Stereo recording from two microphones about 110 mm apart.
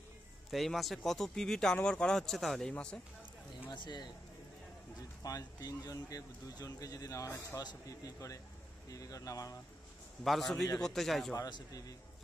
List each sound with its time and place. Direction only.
0.5 s speech: centre (ahead or behind)
3.7 s a man's voice: 45° left (ahead or behind)
5.2 s speech: 35° left (ahead or behind)
10.2 s speech: centre (ahead or behind)
11.3 s speech: 35° left (ahead or behind)